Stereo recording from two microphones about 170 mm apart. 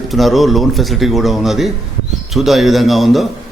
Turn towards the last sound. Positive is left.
turn(degrees=0)  # may be behind; listen again after turning